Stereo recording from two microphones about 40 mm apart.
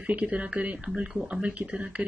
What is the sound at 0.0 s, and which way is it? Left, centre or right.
Speech, right.